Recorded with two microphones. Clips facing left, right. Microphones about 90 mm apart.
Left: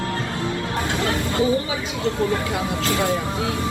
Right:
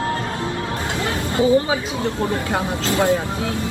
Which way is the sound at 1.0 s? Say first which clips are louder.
Right 2 dB; 25° right (ahead or behind).